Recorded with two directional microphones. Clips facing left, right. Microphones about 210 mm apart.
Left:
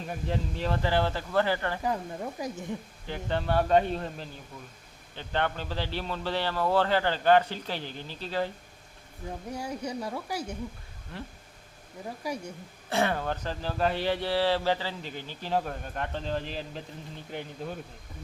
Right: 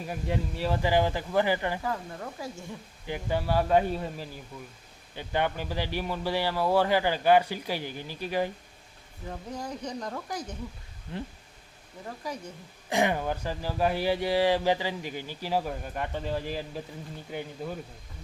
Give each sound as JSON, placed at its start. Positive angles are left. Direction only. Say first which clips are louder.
{"t": 0.0, "sound": "speech", "louder": "right 1 dB", "side_deg": -10}
{"t": 1.8, "sound": "speech", "louder": "left 2 dB", "side_deg": 20}
{"t": 3.1, "sound": "speech", "louder": "right 1 dB", "side_deg": -10}
{"t": 9.5, "sound": "speech", "louder": "left 1 dB", "side_deg": 10}
{"t": 11.1, "sound": "speech", "louder": "right 4 dB", "side_deg": -20}
{"t": 12.2, "sound": "speech", "louder": "left 3 dB", "side_deg": 10}
{"t": 12.9, "sound": "speech", "louder": "right 1 dB", "side_deg": -15}